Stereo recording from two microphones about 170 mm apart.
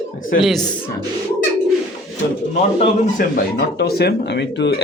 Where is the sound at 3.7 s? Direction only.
70° left (ahead or behind); by 4.7 s 90° left.